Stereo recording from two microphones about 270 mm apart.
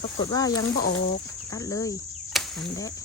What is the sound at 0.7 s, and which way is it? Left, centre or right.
Speech, left.